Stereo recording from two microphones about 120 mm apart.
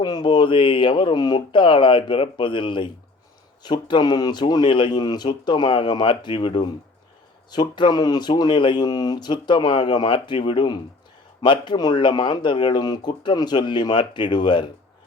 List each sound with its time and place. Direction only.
0.0 s speech: 35° left (ahead or behind)